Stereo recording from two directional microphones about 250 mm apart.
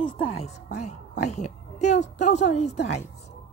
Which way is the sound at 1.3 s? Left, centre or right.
Left.